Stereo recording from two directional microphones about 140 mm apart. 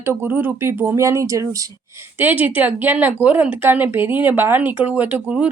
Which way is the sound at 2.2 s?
10° right (ahead or behind).